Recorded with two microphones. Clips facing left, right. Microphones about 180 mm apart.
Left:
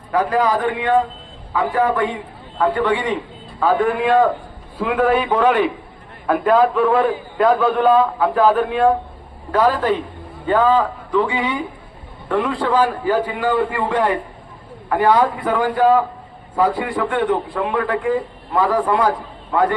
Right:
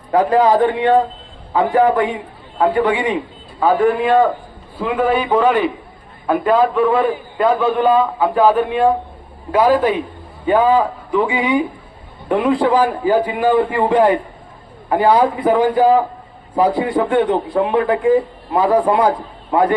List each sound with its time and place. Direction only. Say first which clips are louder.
0.1 s a man's voice: right 5 dB; 30° right (ahead or behind)
3.6 s a man's voice: right 3 dB; centre (ahead or behind)
9.5 s a man's voice: right 3 dB; 10° right (ahead or behind)